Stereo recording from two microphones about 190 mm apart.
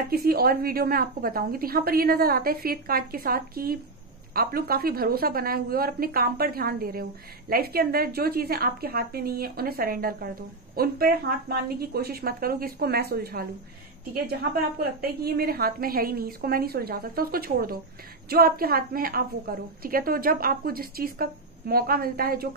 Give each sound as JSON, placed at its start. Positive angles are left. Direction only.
{"t": 0.1, "sound": "a woman's voice", "side_deg": -50}